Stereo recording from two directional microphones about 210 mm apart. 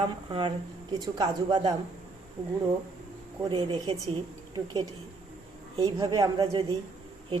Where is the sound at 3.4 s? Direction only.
20° right (ahead or behind).